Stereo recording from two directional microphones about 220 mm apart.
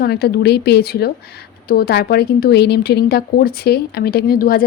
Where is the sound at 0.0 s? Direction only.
45° left (ahead or behind).